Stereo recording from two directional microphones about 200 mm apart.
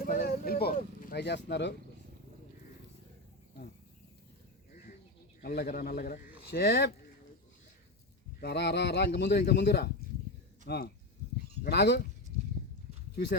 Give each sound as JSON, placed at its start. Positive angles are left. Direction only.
{"t": 0.0, "sound": "speech", "side_deg": 50}
{"t": 5.4, "sound": "speech", "side_deg": 50}
{"t": 8.4, "sound": "a man's voice", "side_deg": 55}